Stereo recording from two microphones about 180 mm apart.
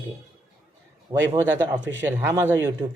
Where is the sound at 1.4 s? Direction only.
20° right (ahead or behind).